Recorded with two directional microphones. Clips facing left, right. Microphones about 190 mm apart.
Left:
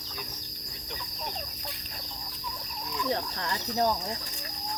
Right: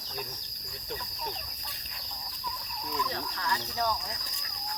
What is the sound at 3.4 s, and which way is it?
Speech, 25° left (ahead or behind).